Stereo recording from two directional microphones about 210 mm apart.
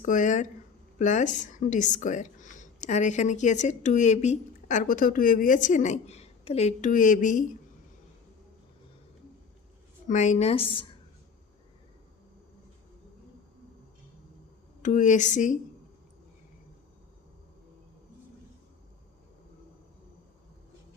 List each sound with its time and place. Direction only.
0.0 s speech: 35° left (ahead or behind)
10.1 s a woman's voice: 35° left (ahead or behind)
14.8 s speech: 35° left (ahead or behind)